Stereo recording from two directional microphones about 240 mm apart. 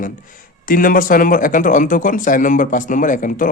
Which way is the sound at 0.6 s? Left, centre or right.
Left.